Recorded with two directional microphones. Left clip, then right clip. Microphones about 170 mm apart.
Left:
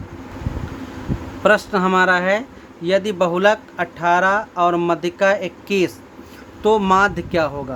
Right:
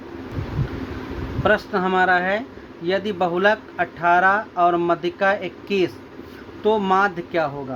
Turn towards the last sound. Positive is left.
turn(degrees=30)  # may be behind; listen again after turning